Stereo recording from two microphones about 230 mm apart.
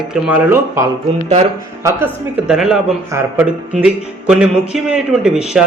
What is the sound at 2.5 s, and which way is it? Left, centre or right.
Speech, centre.